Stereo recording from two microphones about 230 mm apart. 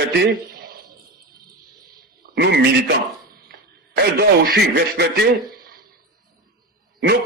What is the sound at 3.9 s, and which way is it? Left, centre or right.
A man's voice, right.